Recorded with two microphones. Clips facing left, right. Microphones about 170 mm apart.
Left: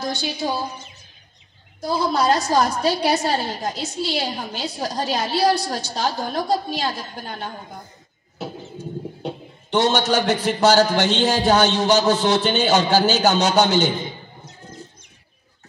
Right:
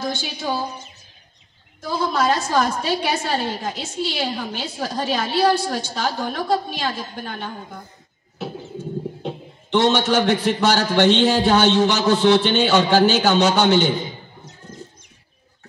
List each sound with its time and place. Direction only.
1.9 s a woman's voice: 40° left (ahead or behind)
9.2 s a woman's voice: 40° left (ahead or behind)